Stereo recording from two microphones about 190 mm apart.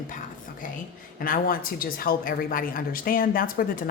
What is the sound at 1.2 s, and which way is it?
Speech, 50° left (ahead or behind).